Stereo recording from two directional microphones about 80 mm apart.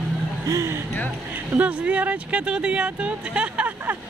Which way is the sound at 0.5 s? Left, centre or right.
Right.